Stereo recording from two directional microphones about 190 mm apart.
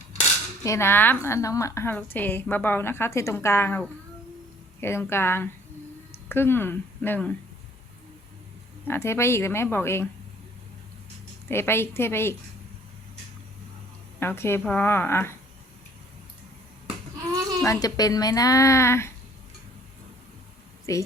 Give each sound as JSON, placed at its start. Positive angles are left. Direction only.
{"t": 0.6, "sound": "a woman's voice", "side_deg": 15}
{"t": 8.9, "sound": "a woman's voice", "side_deg": 15}
{"t": 11.4, "sound": "a woman's voice", "side_deg": 10}
{"t": 14.2, "sound": "a woman's voice", "side_deg": 15}
{"t": 17.6, "sound": "a woman's voice", "side_deg": 15}
{"t": 20.9, "sound": "a woman's voice", "side_deg": 15}